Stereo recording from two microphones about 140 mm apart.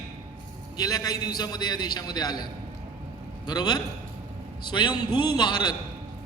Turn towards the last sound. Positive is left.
turn(degrees=30)  # may be behind; listen again after turning